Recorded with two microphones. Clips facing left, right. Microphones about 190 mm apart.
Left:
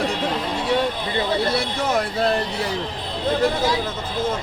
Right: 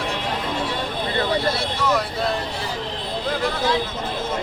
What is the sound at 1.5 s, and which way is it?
Vehicle, 50° left (ahead or behind).